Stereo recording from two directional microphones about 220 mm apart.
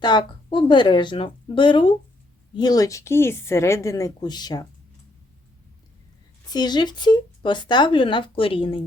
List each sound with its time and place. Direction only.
0.0 s a woman's voice: 20° left (ahead or behind)
6.5 s speech: 20° left (ahead or behind)